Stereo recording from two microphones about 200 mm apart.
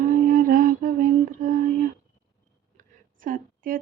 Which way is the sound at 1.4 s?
45° right (ahead or behind).